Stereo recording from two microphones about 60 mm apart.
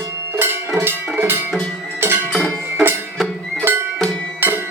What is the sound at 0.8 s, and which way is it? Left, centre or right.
Music, right.